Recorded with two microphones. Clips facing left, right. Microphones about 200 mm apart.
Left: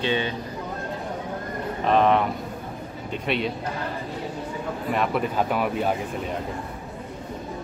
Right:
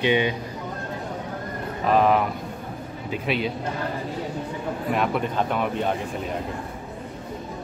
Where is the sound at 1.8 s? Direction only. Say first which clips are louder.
Even; 5° right (ahead or behind).